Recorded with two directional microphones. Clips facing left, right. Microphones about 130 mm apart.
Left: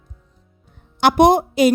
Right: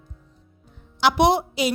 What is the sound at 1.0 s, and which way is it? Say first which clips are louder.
Speech: left 5 dB; 50° left (ahead or behind).